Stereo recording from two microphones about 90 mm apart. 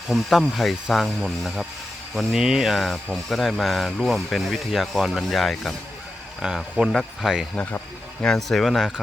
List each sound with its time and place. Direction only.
0.1 s speech: centre (ahead or behind)
7.5 s speech: 20° left (ahead or behind)
8.2 s speech: 5° left (ahead or behind)